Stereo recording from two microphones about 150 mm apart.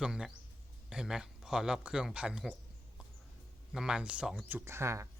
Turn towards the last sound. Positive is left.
turn(degrees=-20)  # may be behind; listen again after turning